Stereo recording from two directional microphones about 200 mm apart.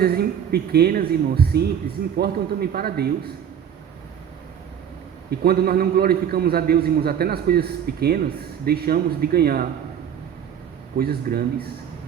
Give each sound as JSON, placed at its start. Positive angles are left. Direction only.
{"t": 0.0, "sound": "a man's voice", "side_deg": -50}
{"t": 5.4, "sound": "a man's voice", "side_deg": -50}
{"t": 10.9, "sound": "a man's voice", "side_deg": -50}